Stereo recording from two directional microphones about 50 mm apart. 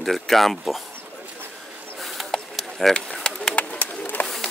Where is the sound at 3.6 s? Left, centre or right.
Left.